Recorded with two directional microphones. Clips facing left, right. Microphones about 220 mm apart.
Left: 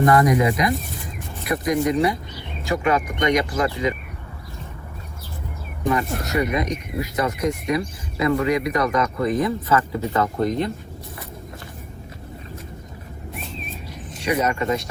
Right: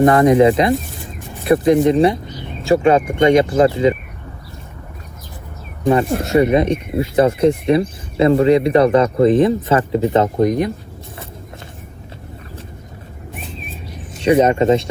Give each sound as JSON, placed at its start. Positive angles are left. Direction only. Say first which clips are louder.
{"t": 0.0, "sound": "speech", "louder": "right 7 dB", "side_deg": -25}
{"t": 6.1, "sound": "speech", "louder": "right 9 dB", "side_deg": -30}
{"t": 14.2, "sound": "speech", "louder": "right 9 dB", "side_deg": -30}